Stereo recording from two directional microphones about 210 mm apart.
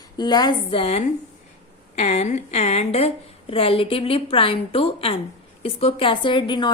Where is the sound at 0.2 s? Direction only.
20° left (ahead or behind).